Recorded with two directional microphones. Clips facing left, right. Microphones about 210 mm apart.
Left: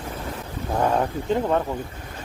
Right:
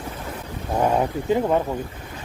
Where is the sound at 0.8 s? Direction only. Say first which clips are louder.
Right 2 dB; 10° right (ahead or behind).